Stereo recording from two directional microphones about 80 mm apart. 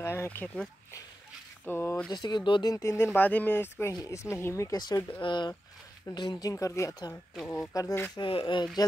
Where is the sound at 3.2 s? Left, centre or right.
Left.